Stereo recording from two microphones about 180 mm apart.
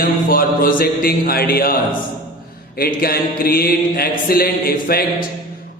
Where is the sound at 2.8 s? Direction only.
55° left (ahead or behind).